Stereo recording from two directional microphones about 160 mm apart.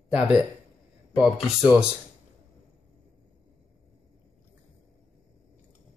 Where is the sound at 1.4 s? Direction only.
5° right (ahead or behind).